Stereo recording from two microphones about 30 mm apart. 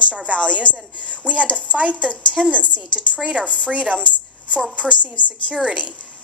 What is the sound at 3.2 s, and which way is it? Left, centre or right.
Speech, right.